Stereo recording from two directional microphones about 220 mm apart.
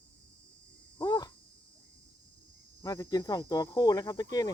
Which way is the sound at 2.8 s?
15° left (ahead or behind).